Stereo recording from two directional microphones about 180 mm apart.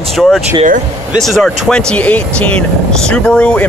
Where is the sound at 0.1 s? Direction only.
Centre (ahead or behind).